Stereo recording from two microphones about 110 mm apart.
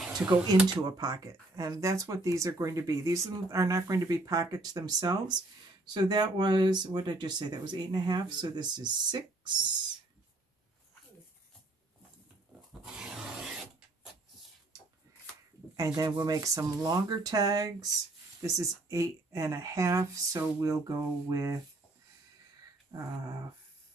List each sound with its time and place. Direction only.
0.0 s a sound: 5° right (ahead or behind)
0.7 s speech: 35° right (ahead or behind)
12.8 s filing: 5° right (ahead or behind)
15.7 s speech: 30° right (ahead or behind)